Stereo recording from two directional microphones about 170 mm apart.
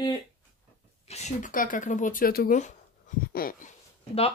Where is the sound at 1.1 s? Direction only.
40° left (ahead or behind); by 3.7 s 60° left (ahead or behind).